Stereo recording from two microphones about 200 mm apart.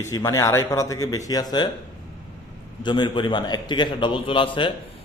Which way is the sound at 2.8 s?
20° left (ahead or behind).